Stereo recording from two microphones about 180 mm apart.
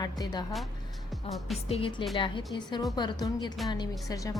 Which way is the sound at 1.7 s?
35° left (ahead or behind).